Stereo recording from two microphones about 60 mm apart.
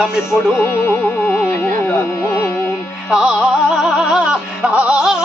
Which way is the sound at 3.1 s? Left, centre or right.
Centre.